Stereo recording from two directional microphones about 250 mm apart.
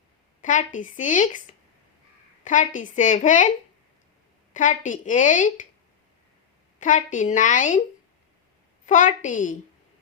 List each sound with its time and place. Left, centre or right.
0.4 s speech: left
2.4 s a woman's voice: left
4.5 s speech: left
6.7 s speech: left
8.9 s speech: left